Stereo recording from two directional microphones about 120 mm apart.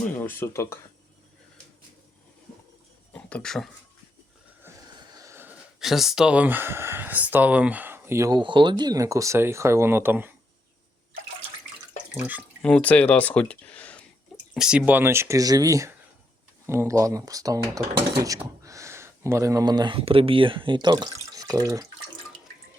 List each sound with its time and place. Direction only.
0.0 s speech: 15° left (ahead or behind)
3.1 s speech: 10° left (ahead or behind)
5.1 s wheeze: 25° right (ahead or behind)
5.8 s speech: 5° right (ahead or behind); by 8.3 s 20° right (ahead or behind)
8.3 s speech: 40° right (ahead or behind); by 10.3 s 15° right (ahead or behind)
12.1 s speech: 15° right (ahead or behind)
12.6 s speech: 10° left (ahead or behind)
14.5 s speech: 5° right (ahead or behind); by 18.3 s 30° right (ahead or behind)
18.6 s a sound: 25° right (ahead or behind)
20.0 s speech: 50° right (ahead or behind); by 21.8 s 30° right (ahead or behind)